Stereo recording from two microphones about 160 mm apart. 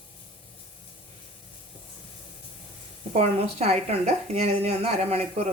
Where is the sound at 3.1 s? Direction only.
40° right (ahead or behind).